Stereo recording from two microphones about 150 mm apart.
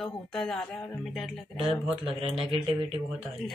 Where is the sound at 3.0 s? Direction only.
5° right (ahead or behind).